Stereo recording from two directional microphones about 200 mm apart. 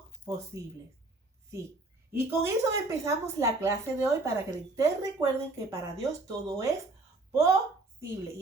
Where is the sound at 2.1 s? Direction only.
15° right (ahead or behind).